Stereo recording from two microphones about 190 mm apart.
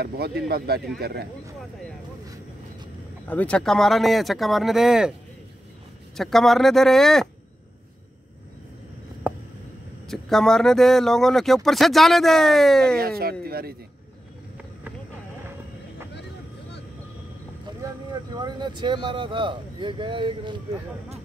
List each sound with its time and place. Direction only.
0.0 s speech: 55° right (ahead or behind)
3.3 s speech: 5° left (ahead or behind)
6.1 s speech: centre (ahead or behind)
9.3 s a sound: 10° right (ahead or behind)
10.0 s speech: centre (ahead or behind)
13.2 s speech: 55° right (ahead or behind)
17.8 s vehicle: 20° right (ahead or behind)
19.0 s speech: 25° right (ahead or behind)